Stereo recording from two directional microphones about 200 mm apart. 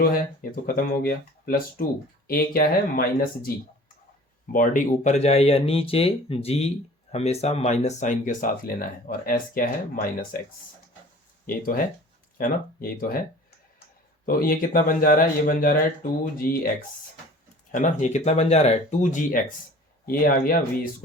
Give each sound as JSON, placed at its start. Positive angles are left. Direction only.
{"t": 0.0, "sound": "speech", "side_deg": 45}
{"t": 4.5, "sound": "speech", "side_deg": 40}
{"t": 11.4, "sound": "speech", "side_deg": 45}
{"t": 14.3, "sound": "speech", "side_deg": 45}